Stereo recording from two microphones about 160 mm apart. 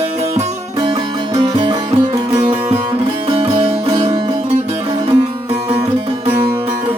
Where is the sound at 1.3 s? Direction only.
25° right (ahead or behind).